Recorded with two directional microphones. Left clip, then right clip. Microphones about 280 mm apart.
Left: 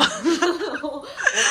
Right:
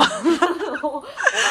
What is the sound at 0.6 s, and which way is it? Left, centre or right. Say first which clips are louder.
Laughter: right 3 dB; centre.